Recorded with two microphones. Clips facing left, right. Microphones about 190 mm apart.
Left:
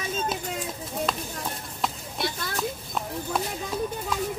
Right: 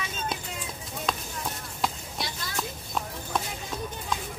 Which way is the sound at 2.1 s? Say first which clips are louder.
Left 5 dB; 55° left (ahead or behind).